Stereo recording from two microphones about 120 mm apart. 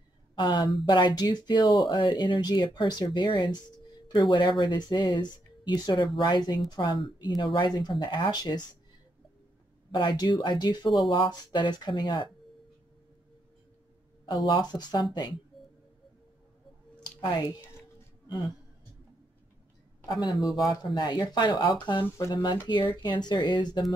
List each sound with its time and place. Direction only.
0.4 s speech: 40° left (ahead or behind)
9.8 s speech: 40° left (ahead or behind)
14.2 s speech: 30° left (ahead or behind)
20.3 s speech: centre (ahead or behind)
20.6 s speech: 35° left (ahead or behind)
22.0 s speech: 25° left (ahead or behind)
22.3 s speech: 40° left (ahead or behind)